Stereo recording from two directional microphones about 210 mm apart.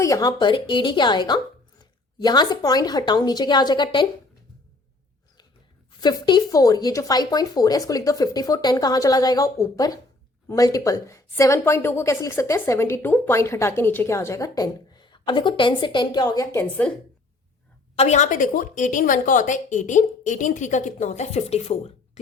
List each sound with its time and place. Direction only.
0.0 s speech: 15° left (ahead or behind)
6.0 s a woman's voice: 20° left (ahead or behind)
17.9 s a woman's voice: 30° left (ahead or behind)